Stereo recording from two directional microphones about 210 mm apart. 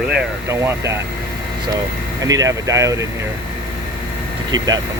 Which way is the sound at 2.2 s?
15° right (ahead or behind).